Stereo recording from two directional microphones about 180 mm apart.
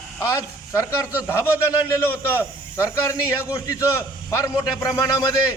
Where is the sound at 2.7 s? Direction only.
15° left (ahead or behind).